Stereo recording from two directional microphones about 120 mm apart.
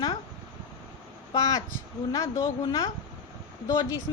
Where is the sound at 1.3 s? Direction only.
30° left (ahead or behind).